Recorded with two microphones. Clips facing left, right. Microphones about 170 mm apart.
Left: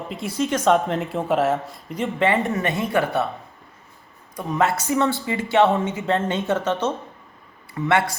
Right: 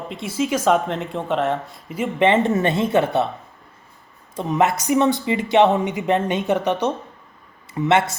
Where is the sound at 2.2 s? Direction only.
20° right (ahead or behind).